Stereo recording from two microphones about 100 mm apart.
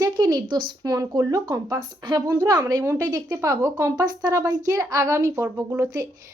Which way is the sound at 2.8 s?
25° right (ahead or behind).